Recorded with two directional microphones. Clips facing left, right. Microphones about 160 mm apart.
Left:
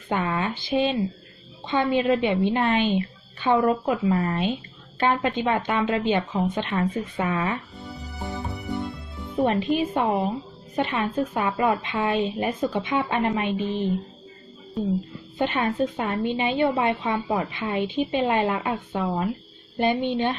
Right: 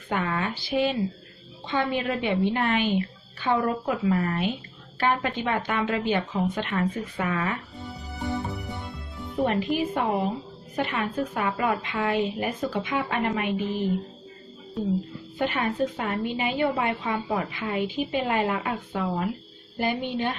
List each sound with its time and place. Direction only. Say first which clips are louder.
0.1 s a woman's voice: left 2 dB; 25° left (ahead or behind)
8.5 s music: left 6 dB; centre (ahead or behind)
9.5 s a woman's voice: left 3 dB; 25° left (ahead or behind)
15.4 s a woman's voice: left 2 dB; 25° left (ahead or behind)